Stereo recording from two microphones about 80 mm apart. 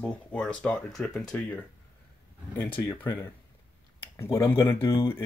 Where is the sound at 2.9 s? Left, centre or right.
Left.